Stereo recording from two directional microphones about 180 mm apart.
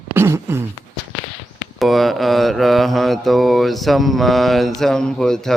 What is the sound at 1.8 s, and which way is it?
Speech, centre (ahead or behind).